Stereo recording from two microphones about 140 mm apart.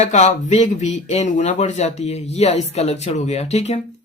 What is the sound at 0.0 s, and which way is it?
Speech, 55° left (ahead or behind).